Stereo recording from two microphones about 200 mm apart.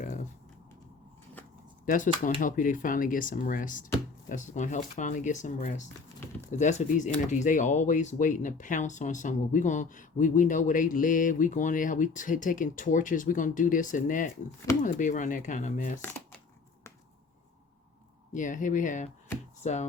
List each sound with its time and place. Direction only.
1.8 s speech: 40° left (ahead or behind)
18.3 s speech: 40° left (ahead or behind)